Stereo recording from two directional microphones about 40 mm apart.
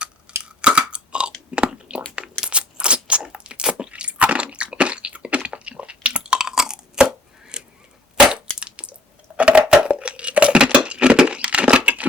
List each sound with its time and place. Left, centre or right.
0.3 s tearing: right
0.6 s chewing: right
1.5 s a sound: right
2.5 s crunch: right
6.4 s chewing: centre
8.5 s a sound: right